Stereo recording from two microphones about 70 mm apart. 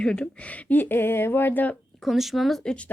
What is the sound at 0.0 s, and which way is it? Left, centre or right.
Speech, centre.